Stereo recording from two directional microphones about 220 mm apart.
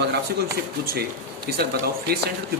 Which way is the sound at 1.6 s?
45° right (ahead or behind).